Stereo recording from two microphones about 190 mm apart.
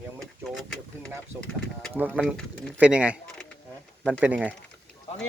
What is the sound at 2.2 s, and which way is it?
Speech, 5° left (ahead or behind).